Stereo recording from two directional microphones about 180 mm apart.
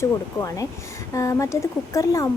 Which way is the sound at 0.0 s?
20° left (ahead or behind).